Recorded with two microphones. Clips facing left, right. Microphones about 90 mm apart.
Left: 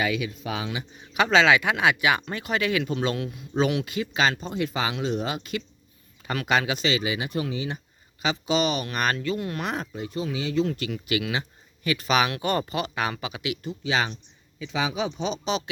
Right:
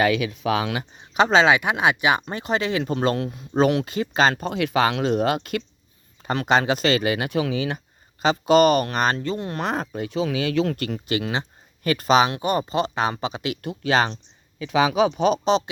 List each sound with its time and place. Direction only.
0.0 s speech: 70° right (ahead or behind)
0.9 s speech: 25° right (ahead or behind)
4.4 s speech: 75° right (ahead or behind); by 5.6 s 55° right (ahead or behind)
6.2 s speech: 30° right (ahead or behind); by 7.8 s 70° right (ahead or behind)
8.2 s speech: 45° right (ahead or behind)
9.0 s speech: 30° right (ahead or behind)
9.8 s speech: 65° right (ahead or behind)
10.8 s speech: 45° right (ahead or behind)
12.1 s speech: 25° right (ahead or behind)
13.6 s speech: 60° right (ahead or behind)